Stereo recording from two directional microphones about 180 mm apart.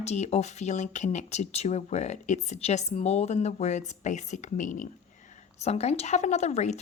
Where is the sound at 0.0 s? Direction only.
40° left (ahead or behind).